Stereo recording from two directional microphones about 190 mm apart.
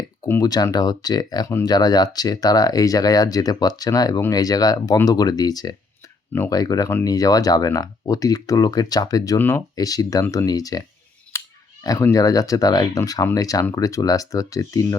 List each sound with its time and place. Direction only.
0.3 s speech: 20° left (ahead or behind)